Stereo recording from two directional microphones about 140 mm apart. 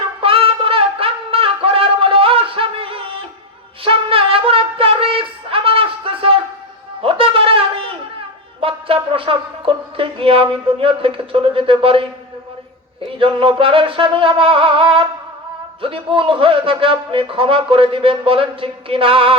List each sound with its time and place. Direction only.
0.2 s a sound: 40° right (ahead or behind)
8.6 s music: 40° right (ahead or behind)
13.1 s a man's voice: 40° right (ahead or behind)